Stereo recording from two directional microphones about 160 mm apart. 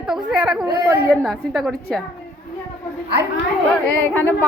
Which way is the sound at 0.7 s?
15° right (ahead or behind).